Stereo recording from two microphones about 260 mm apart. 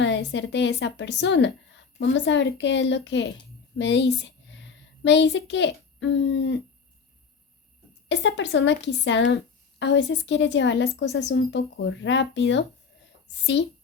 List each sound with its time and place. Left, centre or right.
0.0 s a woman's voice: left
8.0 s speech: left